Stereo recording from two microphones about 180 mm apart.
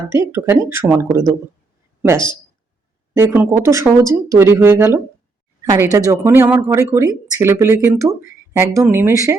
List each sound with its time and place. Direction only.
0.3 s speech: 10° right (ahead or behind)